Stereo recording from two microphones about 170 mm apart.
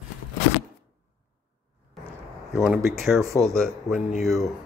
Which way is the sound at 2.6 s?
Centre (ahead or behind).